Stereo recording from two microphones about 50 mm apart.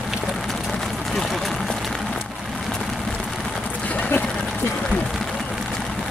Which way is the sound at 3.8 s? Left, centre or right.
Left.